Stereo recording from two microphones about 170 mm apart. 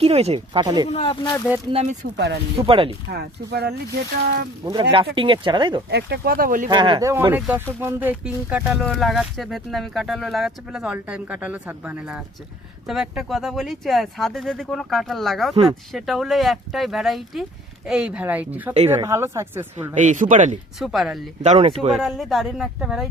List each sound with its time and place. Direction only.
0.0 s speech: 35° right (ahead or behind)
0.9 s speech: 35° left (ahead or behind)
1.7 s speech: 40° right (ahead or behind)
2.1 s speech: 80° right
2.6 s speech: 30° right (ahead or behind)
3.1 s speech: 70° right (ahead or behind)
4.6 s speech: 30° right (ahead or behind)
5.9 s speech: 70° right (ahead or behind); by 6.7 s 55° right (ahead or behind)
6.7 s speech: 30° right (ahead or behind)
7.0 s speech: 15° right (ahead or behind)
19.7 s speech: 45° right (ahead or behind)
20.7 s speech: centre (ahead or behind)
21.4 s speech: 40° right (ahead or behind)
21.9 s speech: centre (ahead or behind)